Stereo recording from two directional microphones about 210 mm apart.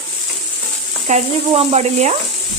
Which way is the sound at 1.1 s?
35° right (ahead or behind).